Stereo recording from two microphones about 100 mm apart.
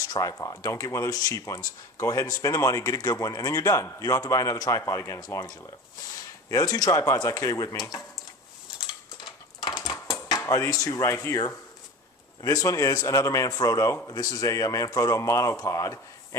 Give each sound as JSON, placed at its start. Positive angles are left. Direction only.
{"t": 0.1, "sound": "speech", "side_deg": 35}
{"t": 9.6, "sound": "a sound", "side_deg": 45}
{"t": 10.4, "sound": "speech", "side_deg": 30}